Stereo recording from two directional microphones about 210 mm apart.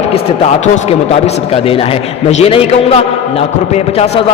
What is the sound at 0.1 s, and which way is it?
Speech, 30° left (ahead or behind).